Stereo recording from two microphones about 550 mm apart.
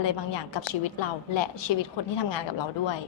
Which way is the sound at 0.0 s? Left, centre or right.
Left.